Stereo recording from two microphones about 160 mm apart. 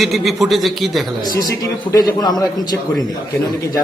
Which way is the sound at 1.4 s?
25° left (ahead or behind).